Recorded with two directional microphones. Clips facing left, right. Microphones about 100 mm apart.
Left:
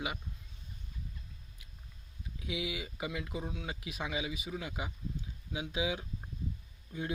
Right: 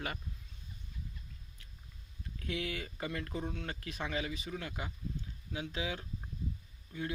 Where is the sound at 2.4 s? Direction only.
10° left (ahead or behind).